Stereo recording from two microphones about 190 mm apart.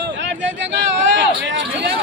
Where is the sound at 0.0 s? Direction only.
70° right (ahead or behind).